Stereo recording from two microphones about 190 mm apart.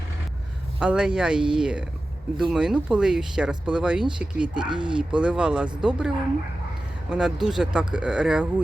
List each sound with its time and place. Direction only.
0.8 s speech: 5° right (ahead or behind)
4.6 s speech: 25° right (ahead or behind)
4.9 s speech: 5° right (ahead or behind)